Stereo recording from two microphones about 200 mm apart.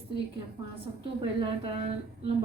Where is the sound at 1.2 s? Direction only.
25° right (ahead or behind).